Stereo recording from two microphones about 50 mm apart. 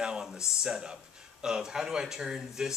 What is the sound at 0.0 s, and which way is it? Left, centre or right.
Speech, centre.